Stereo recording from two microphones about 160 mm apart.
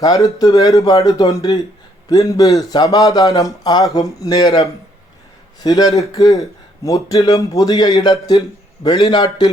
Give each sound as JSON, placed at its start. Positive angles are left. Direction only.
{"t": 0.0, "sound": "a man's voice", "side_deg": 20}
{"t": 5.5, "sound": "a man's voice", "side_deg": 25}